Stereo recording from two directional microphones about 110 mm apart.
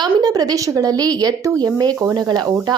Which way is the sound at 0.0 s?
35° right (ahead or behind).